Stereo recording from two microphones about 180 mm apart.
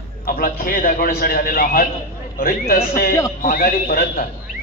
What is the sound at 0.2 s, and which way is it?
A man's voice, 55° left (ahead or behind).